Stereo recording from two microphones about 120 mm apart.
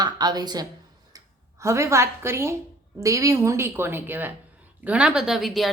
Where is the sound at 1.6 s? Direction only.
25° right (ahead or behind).